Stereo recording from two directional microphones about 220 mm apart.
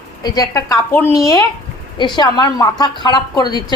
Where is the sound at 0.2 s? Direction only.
15° left (ahead or behind).